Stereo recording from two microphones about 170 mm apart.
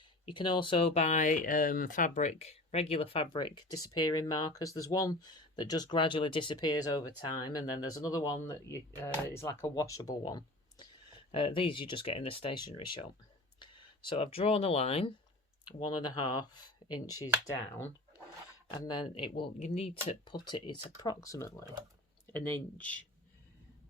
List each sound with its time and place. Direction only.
0.3 s speech: 30° left (ahead or behind)
15.6 s speech: 25° left (ahead or behind)
17.4 s speech: 15° left (ahead or behind)
18.7 s speech: 25° left (ahead or behind)
20.2 s speech: 25° left (ahead or behind); by 23.0 s 10° left (ahead or behind)